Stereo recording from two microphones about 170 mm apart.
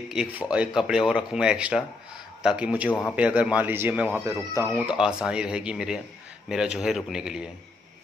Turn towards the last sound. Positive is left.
turn(degrees=-5)  # may be behind; listen again after turning